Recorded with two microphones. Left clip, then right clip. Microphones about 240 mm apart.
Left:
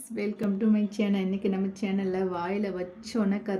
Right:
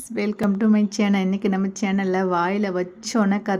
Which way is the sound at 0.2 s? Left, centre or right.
Right.